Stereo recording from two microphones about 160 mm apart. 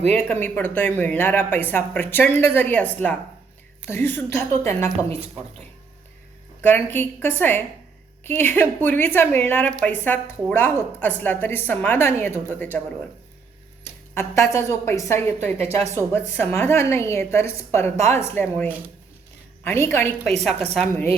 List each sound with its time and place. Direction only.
0.1 s a woman's voice: 10° left (ahead or behind)
6.6 s a woman's voice: 10° left (ahead or behind)
14.1 s a woman's voice: 15° left (ahead or behind)